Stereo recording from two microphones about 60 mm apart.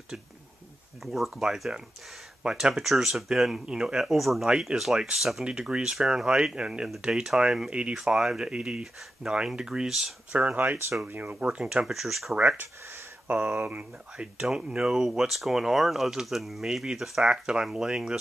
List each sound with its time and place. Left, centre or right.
1.0 s speech: centre
4.5 s speech: centre
10.3 s speech: right
11.5 s speech: centre
11.8 s speech: centre
12.4 s speech: right
14.4 s speech: centre